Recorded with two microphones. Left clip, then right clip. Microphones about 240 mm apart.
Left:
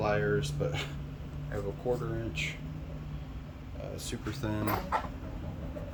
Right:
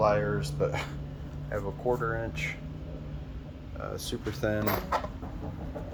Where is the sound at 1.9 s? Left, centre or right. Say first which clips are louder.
Right 5 dB; right.